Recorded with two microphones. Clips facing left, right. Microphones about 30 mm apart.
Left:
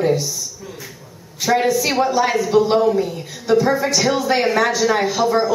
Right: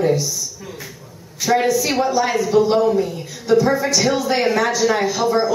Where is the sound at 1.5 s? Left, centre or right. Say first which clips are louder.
Even; centre.